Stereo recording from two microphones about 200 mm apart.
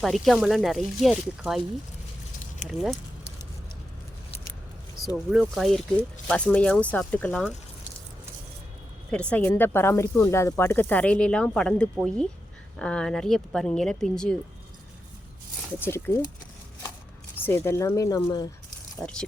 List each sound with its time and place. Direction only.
0.0 s speech: centre (ahead or behind)
2.6 s speech: centre (ahead or behind)
5.1 s speech: centre (ahead or behind)
9.3 s speech: 10° left (ahead or behind)
15.8 s speech: 10° left (ahead or behind)
17.3 s speech: 10° left (ahead or behind)
18.9 s speech: 5° left (ahead or behind)